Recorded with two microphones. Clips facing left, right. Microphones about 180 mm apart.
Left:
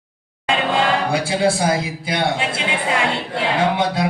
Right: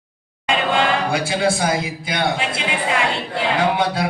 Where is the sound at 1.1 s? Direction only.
30° left (ahead or behind).